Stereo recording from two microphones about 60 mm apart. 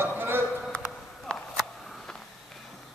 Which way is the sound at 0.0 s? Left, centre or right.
Right.